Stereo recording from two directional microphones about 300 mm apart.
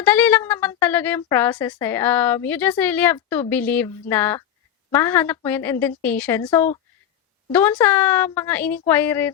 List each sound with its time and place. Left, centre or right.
0.0 s a woman's voice: centre